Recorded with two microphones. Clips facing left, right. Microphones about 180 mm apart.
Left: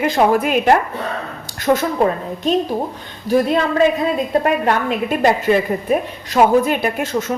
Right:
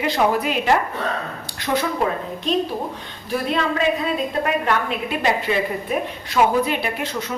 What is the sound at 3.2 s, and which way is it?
A woman's voice, 40° left (ahead or behind).